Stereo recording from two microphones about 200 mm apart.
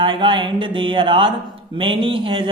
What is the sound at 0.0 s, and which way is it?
Speech, 25° right (ahead or behind).